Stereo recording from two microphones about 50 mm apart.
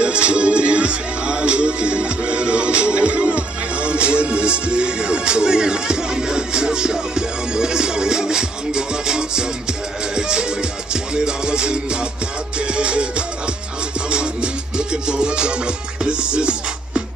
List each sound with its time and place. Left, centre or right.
0.0 s music: right